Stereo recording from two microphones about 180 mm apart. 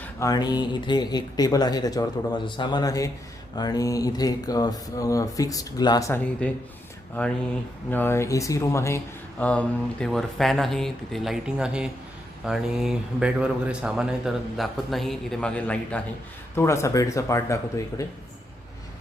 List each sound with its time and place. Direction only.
0.2 s speech: 20° left (ahead or behind)
7.9 s speech: 10° left (ahead or behind)